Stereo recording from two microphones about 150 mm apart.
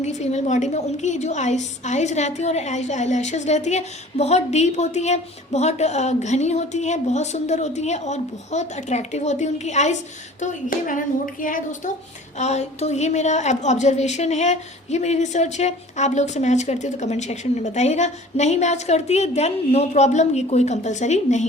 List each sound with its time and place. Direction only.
0.0 s a woman's voice: 50° left (ahead or behind)
10.4 s speech: 60° left (ahead or behind)
12.4 s a woman's voice: 50° left (ahead or behind)